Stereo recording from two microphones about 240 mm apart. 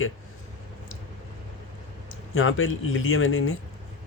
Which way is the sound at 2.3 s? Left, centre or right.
Left.